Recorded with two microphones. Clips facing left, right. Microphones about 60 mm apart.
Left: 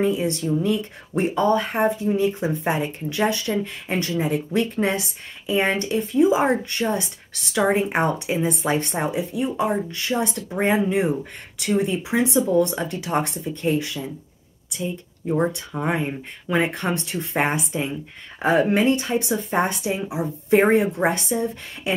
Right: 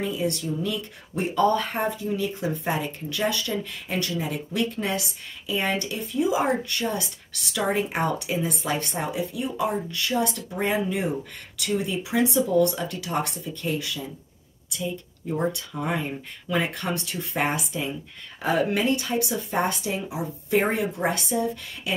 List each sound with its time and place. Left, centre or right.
0.0 s speech: left